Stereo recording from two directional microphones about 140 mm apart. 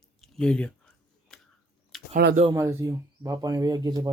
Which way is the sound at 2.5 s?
20° right (ahead or behind).